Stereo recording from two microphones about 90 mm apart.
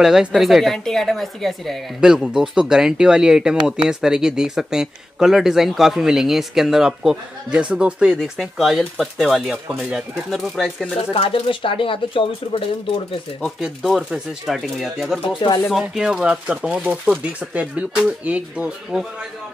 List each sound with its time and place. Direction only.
0.0 s speech: 5° right (ahead or behind)
11.0 s speech: 90° left
13.6 s speech: 5° right (ahead or behind)